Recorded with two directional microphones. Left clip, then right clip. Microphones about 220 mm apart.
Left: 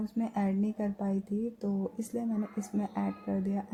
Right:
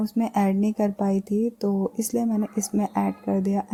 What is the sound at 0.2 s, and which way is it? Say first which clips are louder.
Speech: right 9 dB; 40° right (ahead or behind).